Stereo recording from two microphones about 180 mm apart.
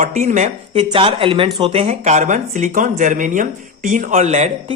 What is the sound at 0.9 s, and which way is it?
Speech, 30° right (ahead or behind).